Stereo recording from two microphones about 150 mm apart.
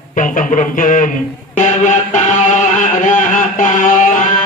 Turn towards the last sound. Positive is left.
turn(degrees=60)  # may be behind; listen again after turning